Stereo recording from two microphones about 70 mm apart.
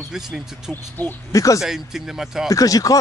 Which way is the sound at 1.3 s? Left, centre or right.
Left.